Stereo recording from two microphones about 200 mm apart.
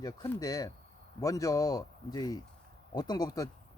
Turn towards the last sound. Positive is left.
turn(degrees=20)  # may be behind; listen again after turning